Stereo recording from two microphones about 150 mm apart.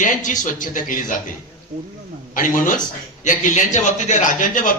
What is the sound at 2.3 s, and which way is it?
A man's voice, 60° left (ahead or behind).